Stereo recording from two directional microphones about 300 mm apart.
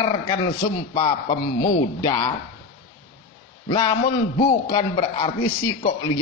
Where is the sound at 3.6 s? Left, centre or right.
Centre.